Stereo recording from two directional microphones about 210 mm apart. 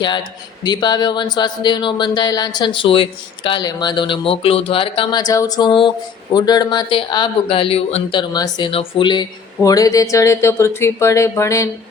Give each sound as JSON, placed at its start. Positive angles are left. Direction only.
{"t": 0.6, "sound": "speech", "side_deg": 20}